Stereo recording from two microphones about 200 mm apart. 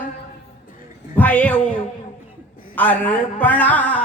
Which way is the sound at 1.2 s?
5° left (ahead or behind).